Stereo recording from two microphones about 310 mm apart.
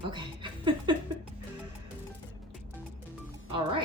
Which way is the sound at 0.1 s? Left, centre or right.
Centre.